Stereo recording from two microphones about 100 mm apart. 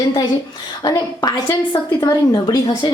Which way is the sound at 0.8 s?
40° left (ahead or behind).